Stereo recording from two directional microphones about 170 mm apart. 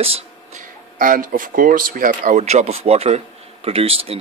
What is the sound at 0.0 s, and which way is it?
A man's voice, 40° right (ahead or behind).